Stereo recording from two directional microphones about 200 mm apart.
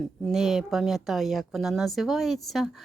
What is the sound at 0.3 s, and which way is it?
Speech, centre (ahead or behind).